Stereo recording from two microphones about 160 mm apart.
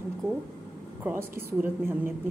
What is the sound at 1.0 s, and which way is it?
A woman's voice, 15° right (ahead or behind).